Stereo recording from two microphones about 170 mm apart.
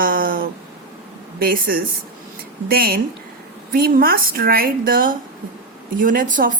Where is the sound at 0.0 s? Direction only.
55° right (ahead or behind).